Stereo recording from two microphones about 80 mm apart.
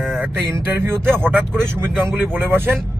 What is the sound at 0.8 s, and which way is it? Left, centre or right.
Speech, right.